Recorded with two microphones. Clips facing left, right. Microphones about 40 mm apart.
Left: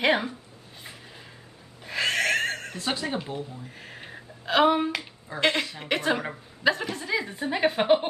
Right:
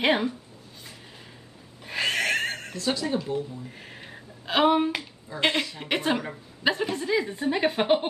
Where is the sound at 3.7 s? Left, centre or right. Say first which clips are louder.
Left 1 dB; centre.